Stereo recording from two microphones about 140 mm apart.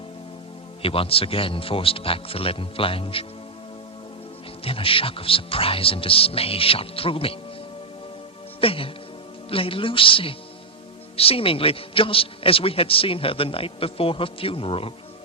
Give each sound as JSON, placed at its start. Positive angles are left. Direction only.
{"t": 0.8, "sound": "a man's voice", "side_deg": 40}
{"t": 4.6, "sound": "a man's voice", "side_deg": 40}
{"t": 8.6, "sound": "a man's voice", "side_deg": 40}